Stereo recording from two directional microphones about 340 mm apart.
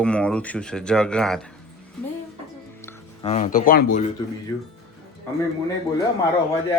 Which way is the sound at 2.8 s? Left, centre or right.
Centre.